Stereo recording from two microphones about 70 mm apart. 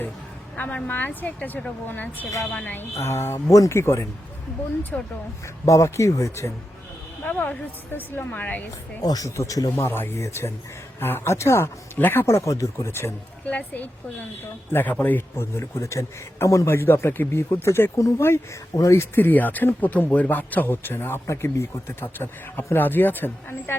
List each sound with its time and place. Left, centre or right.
0.5 s a woman's voice: left
2.9 s a man's voice: left
4.9 s speech: centre
5.6 s a man's voice: left
7.3 s speech: left
9.0 s speech: left
9.3 s a man's voice: left
10.2 s a man's voice: left
11.9 s speech: left
12.2 s speech: left
13.4 s speech: left
15.4 s a man's voice: left
16.7 s a man's voice: left
19.1 s speech: left